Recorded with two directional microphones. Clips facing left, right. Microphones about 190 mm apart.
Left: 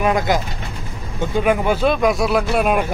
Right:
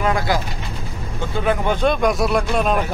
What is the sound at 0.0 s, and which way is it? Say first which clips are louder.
Speech: left 2 dB; 20° left (ahead or behind).